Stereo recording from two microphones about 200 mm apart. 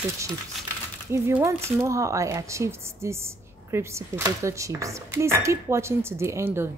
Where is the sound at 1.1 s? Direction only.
10° right (ahead or behind).